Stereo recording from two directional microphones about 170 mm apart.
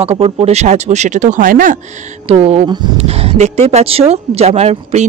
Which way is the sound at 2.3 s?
35° right (ahead or behind).